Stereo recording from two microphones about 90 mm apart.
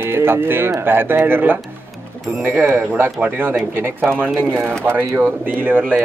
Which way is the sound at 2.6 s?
25° right (ahead or behind).